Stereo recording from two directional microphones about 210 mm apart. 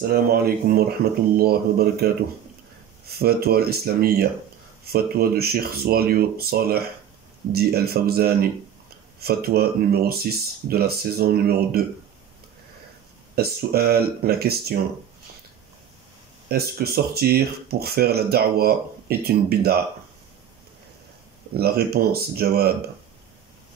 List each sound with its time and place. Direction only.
0.0 s speech: 45° right (ahead or behind)
3.1 s speech: 45° right (ahead or behind)
13.4 s speech: 50° right (ahead or behind)
16.4 s speech: 50° right (ahead or behind)
21.5 s speech: 50° right (ahead or behind)